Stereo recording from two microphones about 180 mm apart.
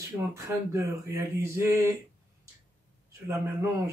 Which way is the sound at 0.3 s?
15° right (ahead or behind).